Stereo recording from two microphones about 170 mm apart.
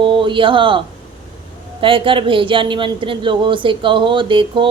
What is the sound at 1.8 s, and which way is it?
Speech, 30° right (ahead or behind).